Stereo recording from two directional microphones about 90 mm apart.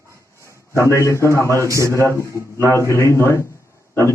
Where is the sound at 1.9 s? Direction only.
30° left (ahead or behind).